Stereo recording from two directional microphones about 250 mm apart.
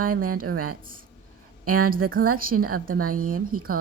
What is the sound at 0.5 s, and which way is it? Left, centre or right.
Speech, right.